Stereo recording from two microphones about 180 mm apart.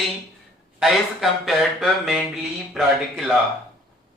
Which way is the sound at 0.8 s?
Centre (ahead or behind).